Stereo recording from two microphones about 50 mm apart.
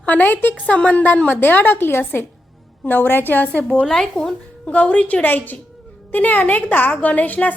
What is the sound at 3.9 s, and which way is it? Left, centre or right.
Speech, centre.